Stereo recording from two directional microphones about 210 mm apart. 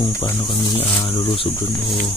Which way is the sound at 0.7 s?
20° left (ahead or behind).